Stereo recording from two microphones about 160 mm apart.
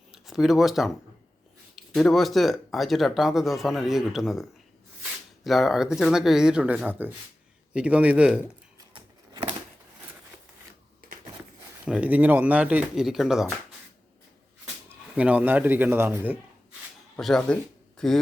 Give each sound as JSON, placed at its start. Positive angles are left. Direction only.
{"t": 0.1, "sound": "speech", "side_deg": 0}
{"t": 8.9, "sound": "a sound", "side_deg": -30}
{"t": 11.9, "sound": "speech", "side_deg": -10}
{"t": 15.1, "sound": "speech", "side_deg": -10}
{"t": 17.2, "sound": "speech", "side_deg": 5}